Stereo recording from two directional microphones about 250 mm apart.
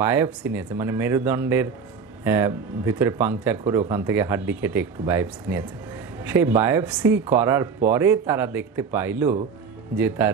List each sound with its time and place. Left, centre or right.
0.0 s speech: centre